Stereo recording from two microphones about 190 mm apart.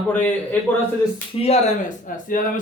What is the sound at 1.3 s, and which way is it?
Speech, 35° left (ahead or behind).